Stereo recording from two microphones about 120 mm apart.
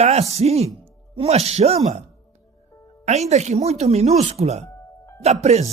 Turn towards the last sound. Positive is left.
turn(degrees=-65)  # may be behind; listen again after turning